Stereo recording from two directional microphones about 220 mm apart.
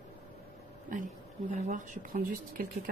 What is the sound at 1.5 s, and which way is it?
Speech, 35° right (ahead or behind).